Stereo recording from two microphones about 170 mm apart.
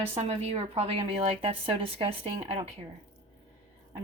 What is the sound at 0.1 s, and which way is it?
A woman's voice, 40° right (ahead or behind).